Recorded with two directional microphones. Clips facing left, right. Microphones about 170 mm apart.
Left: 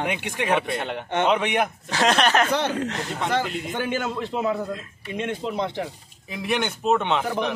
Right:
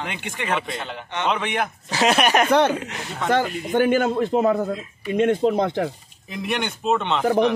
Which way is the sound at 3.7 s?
50° right (ahead or behind).